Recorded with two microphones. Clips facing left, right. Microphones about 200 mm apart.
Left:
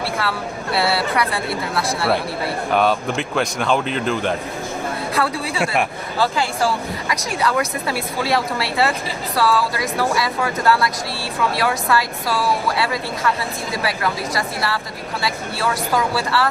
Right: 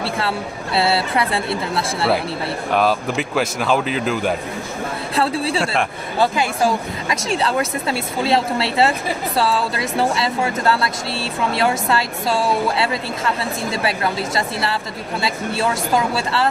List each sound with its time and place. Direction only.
0.0 s speech: 25° right (ahead or behind)
2.7 s speech: 5° right (ahead or behind)
5.1 s speech: 30° right (ahead or behind)